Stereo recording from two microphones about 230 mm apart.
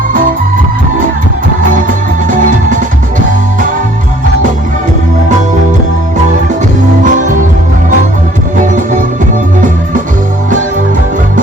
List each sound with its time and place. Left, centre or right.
1.7 s music: right
7.0 s music: right